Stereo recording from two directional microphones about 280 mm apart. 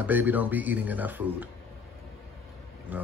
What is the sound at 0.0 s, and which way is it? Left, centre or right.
A man's voice, centre.